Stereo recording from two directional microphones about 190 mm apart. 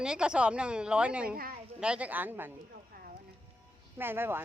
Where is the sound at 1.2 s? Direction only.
50° right (ahead or behind).